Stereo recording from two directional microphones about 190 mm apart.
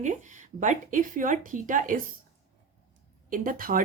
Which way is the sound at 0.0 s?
40° right (ahead or behind).